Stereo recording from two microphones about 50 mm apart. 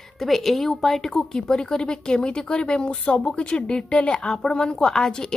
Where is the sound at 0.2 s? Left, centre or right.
Centre.